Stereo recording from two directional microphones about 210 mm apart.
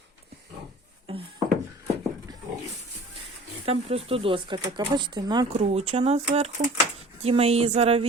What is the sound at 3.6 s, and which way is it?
A woman's voice, 30° right (ahead or behind).